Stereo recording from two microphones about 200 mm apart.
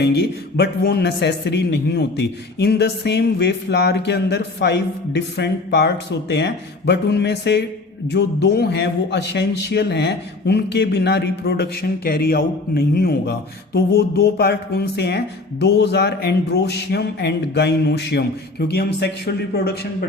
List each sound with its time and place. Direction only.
0.0 s a man's voice: 55° left (ahead or behind)